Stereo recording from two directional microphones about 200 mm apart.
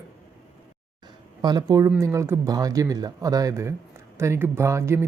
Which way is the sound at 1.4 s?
20° right (ahead or behind).